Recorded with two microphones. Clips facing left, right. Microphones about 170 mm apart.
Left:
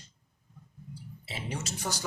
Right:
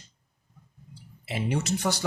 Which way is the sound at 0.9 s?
65° right (ahead or behind).